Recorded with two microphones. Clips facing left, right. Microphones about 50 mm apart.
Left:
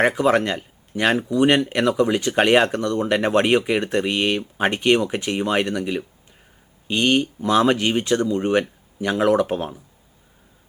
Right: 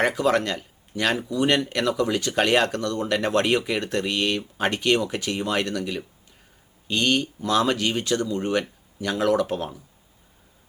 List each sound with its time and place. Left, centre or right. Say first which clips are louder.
0.0 s speech: left 4 dB; left